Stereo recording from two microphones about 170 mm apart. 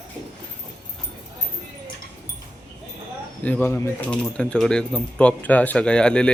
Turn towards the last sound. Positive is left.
turn(degrees=5)  # may be behind; listen again after turning